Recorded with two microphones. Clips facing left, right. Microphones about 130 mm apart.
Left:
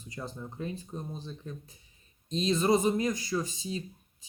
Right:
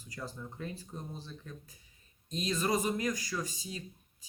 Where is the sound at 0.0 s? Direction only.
25° left (ahead or behind).